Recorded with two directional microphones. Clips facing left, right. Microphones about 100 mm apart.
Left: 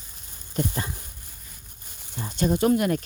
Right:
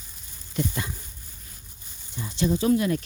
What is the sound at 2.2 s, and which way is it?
Speech, 45° left (ahead or behind).